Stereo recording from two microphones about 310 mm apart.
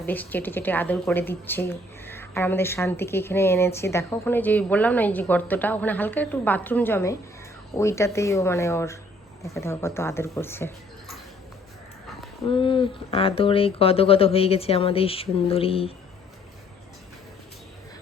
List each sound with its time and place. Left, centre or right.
0.0 s a woman's voice: centre
12.5 s a woman's voice: centre